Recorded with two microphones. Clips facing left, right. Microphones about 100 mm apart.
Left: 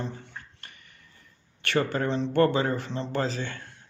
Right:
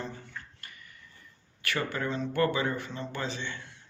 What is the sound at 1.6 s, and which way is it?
Speech, 35° left (ahead or behind).